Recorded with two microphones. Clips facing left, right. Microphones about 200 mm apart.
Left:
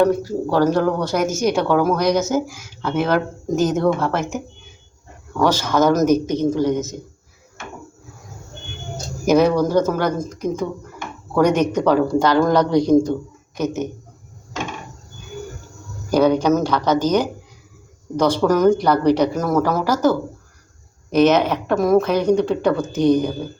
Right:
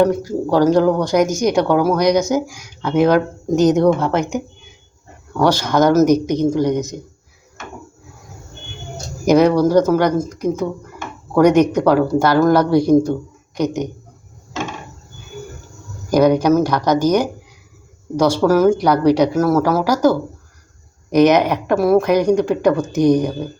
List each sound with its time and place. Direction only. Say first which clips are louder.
0.0 s speech: right 1 dB; 15° right (ahead or behind)
5.4 s speech: right 2 dB; 15° right (ahead or behind)
9.2 s speech: right 3 dB; 15° right (ahead or behind)
16.0 s speech: right 2 dB; 10° right (ahead or behind)